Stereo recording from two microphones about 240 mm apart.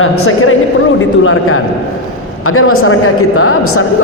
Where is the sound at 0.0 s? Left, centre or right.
Left.